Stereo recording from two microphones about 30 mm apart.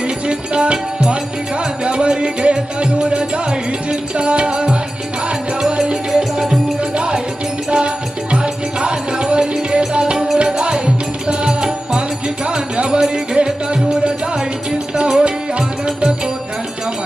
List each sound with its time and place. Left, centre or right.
0.0 s music: right
6.1 s music: right
14.9 s music: right
15.2 s music: right